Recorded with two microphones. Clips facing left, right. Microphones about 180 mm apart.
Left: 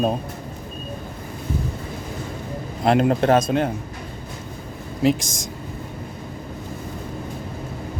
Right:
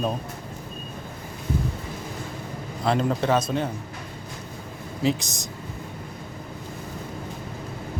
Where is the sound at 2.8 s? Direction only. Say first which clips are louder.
Left 6 dB; 70° left (ahead or behind).